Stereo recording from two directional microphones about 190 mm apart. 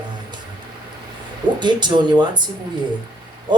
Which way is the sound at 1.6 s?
25° right (ahead or behind).